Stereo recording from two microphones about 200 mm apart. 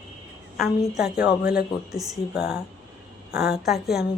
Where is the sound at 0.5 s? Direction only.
Centre (ahead or behind).